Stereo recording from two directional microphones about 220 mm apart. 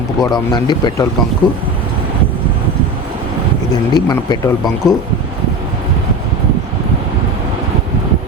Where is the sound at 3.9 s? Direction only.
20° left (ahead or behind).